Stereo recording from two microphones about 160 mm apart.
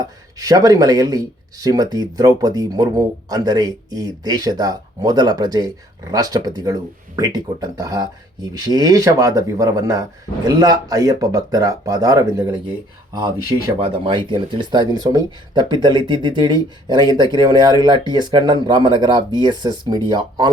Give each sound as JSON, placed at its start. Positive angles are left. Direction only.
{"t": 0.0, "sound": "speech", "side_deg": -25}
{"t": 13.7, "sound": "speech", "side_deg": -35}